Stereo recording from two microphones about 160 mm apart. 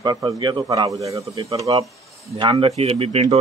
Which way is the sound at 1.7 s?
35° right (ahead or behind).